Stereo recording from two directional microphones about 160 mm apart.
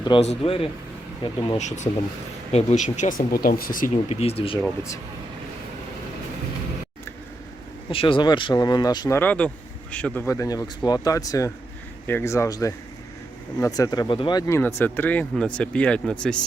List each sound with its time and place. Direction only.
0.2 s speech: 40° left (ahead or behind)
1.5 s speech: 45° left (ahead or behind)
4.1 s speech: 40° left (ahead or behind)
7.9 s speech: 35° left (ahead or behind)
9.1 s speech: 10° left (ahead or behind)
10.2 s speech: 20° left (ahead or behind); by 16.4 s 5° left (ahead or behind)